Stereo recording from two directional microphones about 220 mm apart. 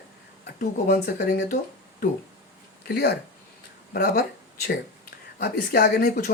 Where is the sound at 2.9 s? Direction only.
45° left (ahead or behind).